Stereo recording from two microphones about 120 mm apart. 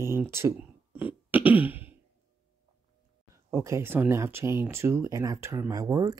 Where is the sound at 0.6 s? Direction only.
15° right (ahead or behind).